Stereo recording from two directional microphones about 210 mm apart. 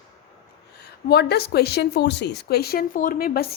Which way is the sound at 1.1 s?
50° left (ahead or behind).